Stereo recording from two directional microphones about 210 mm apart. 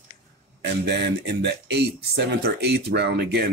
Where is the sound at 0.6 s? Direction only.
55° right (ahead or behind).